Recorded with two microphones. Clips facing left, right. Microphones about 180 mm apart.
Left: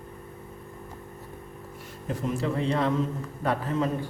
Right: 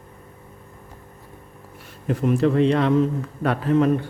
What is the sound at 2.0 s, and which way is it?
A man's voice, 65° right (ahead or behind).